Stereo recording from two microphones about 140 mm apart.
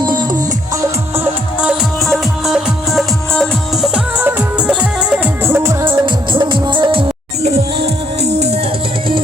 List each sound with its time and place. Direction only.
0.0 s music: 30° right (ahead or behind)
0.8 s music: 15° right (ahead or behind); by 3.8 s 5° left (ahead or behind)
3.9 s music: 10° right (ahead or behind)
5.9 s music: 35° right (ahead or behind)
8.2 s music: 50° right (ahead or behind)